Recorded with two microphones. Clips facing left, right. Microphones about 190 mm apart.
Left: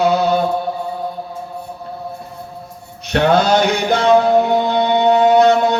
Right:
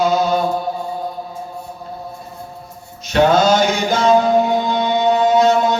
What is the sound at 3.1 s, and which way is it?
Mantra, 60° left (ahead or behind).